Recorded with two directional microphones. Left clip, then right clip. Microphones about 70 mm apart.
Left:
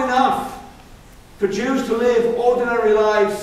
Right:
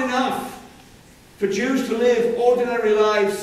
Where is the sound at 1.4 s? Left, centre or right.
Right.